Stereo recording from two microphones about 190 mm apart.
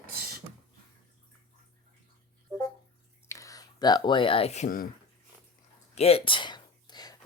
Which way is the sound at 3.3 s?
15° left (ahead or behind).